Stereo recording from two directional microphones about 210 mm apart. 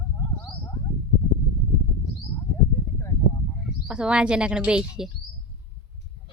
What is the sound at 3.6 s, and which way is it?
Speech, 5° right (ahead or behind).